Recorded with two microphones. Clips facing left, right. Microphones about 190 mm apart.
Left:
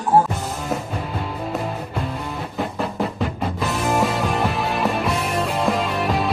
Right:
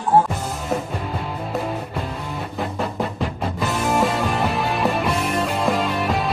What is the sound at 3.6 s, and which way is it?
Music, centre (ahead or behind).